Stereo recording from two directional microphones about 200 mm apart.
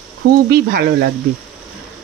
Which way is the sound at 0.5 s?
50° right (ahead or behind).